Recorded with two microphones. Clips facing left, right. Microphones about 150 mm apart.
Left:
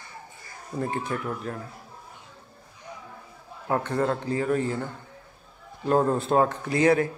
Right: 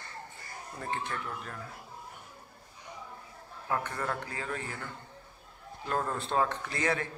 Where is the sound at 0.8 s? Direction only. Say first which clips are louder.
Left 7 dB; 40° left (ahead or behind).